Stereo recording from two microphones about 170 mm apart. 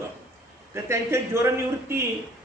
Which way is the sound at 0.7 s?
15° right (ahead or behind).